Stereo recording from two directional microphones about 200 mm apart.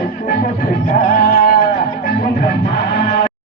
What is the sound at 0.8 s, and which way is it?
Music, 45° left (ahead or behind).